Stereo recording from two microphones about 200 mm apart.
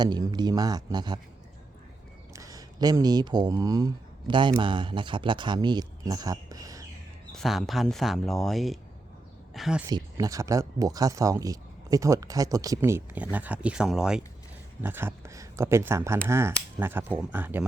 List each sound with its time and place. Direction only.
0.0 s speech: 20° right (ahead or behind)
2.3 s speech: 15° right (ahead or behind)
7.3 s speech: centre (ahead or behind)
9.9 s speech: 15° right (ahead or behind)